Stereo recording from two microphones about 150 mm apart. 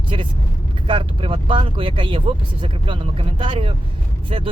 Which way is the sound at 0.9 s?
35° right (ahead or behind).